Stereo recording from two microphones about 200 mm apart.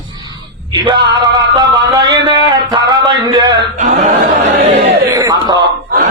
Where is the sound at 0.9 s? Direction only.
25° right (ahead or behind).